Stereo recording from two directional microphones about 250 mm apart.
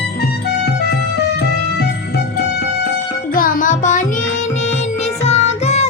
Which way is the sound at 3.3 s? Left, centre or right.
Left.